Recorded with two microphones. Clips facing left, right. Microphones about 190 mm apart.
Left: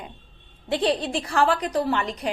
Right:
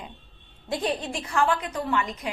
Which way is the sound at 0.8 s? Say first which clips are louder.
Left 6 dB; 35° left (ahead or behind).